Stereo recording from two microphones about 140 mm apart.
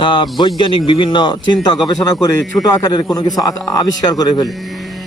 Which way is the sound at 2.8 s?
25° left (ahead or behind).